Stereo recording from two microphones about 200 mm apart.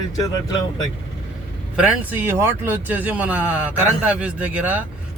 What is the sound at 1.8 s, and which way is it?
Speech, 10° right (ahead or behind).